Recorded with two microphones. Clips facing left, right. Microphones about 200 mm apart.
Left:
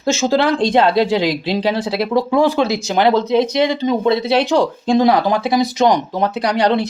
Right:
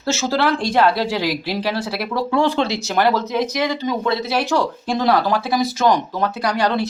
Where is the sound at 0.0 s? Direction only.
15° left (ahead or behind).